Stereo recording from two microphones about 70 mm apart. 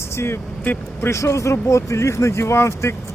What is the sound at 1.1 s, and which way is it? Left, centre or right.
Speech, left.